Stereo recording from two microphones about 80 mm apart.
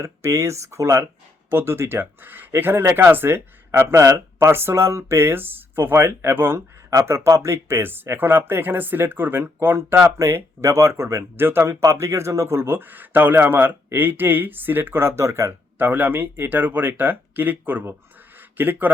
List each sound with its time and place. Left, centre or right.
0.0 s speech: right
6.9 s speech: right
18.3 s a sound: right